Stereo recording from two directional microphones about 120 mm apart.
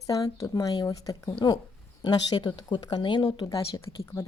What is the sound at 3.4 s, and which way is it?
Speech, 30° left (ahead or behind).